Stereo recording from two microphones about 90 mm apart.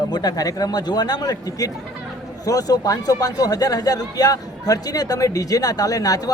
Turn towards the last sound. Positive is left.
turn(degrees=45)  # may be behind; listen again after turning